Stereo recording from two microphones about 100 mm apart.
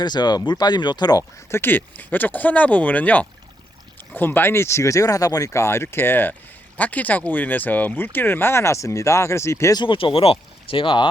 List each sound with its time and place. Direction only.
0.0 s speech: 45° left (ahead or behind)
1.5 s speech: 25° left (ahead or behind)
9.7 s speech: 55° left (ahead or behind)